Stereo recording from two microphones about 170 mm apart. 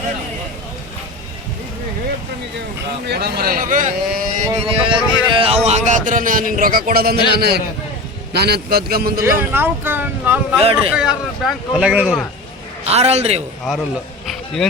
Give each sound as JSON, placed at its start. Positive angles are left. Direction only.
{"t": 3.1, "sound": "speech", "side_deg": -70}
{"t": 4.6, "sound": "speech", "side_deg": -30}
{"t": 9.2, "sound": "speech", "side_deg": -15}
{"t": 10.6, "sound": "a man's voice", "side_deg": -35}
{"t": 10.9, "sound": "speech", "side_deg": -5}
{"t": 12.8, "sound": "a man's voice", "side_deg": -40}
{"t": 14.3, "sound": "a sound", "side_deg": 5}